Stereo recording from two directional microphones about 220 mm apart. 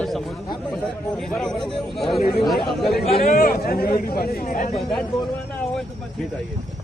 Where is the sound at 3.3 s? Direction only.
45° left (ahead or behind).